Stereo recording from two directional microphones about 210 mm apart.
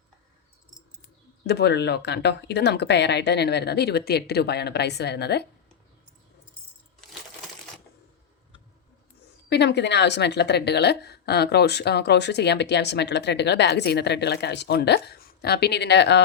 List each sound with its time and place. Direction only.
1.5 s a woman's voice: 50° left (ahead or behind)
9.5 s a woman's voice: 55° left (ahead or behind)